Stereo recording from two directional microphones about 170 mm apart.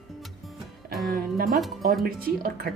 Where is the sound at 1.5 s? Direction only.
Centre (ahead or behind).